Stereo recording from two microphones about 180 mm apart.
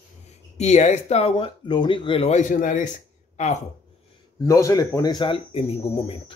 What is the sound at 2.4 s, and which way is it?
Speech, 45° left (ahead or behind).